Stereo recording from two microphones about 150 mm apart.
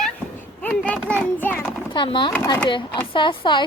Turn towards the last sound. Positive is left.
turn(degrees=30)  # may be behind; listen again after turning